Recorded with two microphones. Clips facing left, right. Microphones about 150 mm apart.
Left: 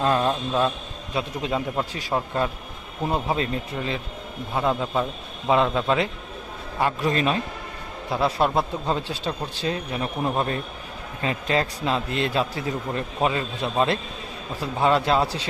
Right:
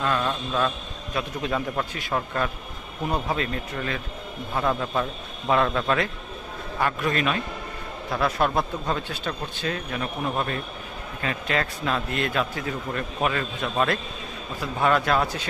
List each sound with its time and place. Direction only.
0.0 s speech: 35° left (ahead or behind)
1.1 s a man's voice: 20° left (ahead or behind)